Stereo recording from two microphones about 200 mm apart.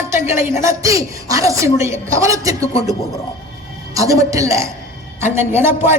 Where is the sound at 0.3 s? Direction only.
15° right (ahead or behind).